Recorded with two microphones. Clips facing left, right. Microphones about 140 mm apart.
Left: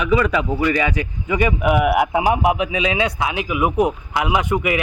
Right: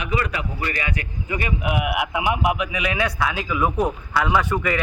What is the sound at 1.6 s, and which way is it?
A man's voice, 50° left (ahead or behind).